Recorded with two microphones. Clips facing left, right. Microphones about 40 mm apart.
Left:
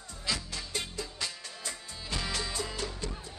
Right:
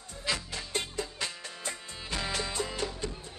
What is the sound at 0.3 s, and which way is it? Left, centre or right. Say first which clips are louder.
Music: right 2 dB; right.